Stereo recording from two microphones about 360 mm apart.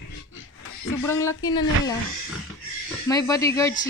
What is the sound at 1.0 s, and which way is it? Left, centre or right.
Speech, centre.